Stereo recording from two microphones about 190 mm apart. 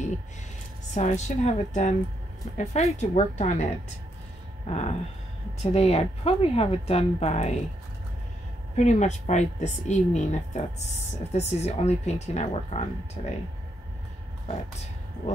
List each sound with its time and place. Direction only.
0.9 s a woman's voice: 35° left (ahead or behind)
4.6 s a woman's voice: 35° left (ahead or behind)
8.7 s a woman's voice: 35° left (ahead or behind)